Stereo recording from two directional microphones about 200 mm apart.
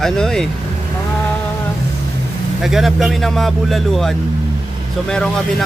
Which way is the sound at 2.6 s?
Centre (ahead or behind).